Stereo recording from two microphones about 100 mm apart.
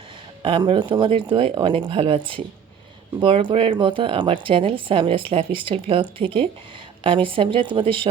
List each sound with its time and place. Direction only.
0.4 s speech: 55° right (ahead or behind)
1.5 s speech: 50° right (ahead or behind)